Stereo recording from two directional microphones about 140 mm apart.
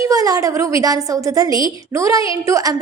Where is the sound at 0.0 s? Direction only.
25° right (ahead or behind).